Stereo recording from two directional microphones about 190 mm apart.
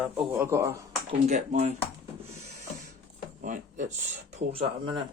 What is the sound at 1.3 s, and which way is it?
Speech, 40° right (ahead or behind).